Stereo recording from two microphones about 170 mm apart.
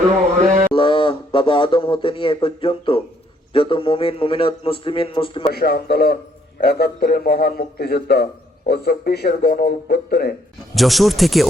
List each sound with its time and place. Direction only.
0.4 s mantra: 40° right (ahead or behind)
0.7 s speech: 30° left (ahead or behind)
5.5 s a man's voice: 65° left (ahead or behind)
10.8 s speech: centre (ahead or behind)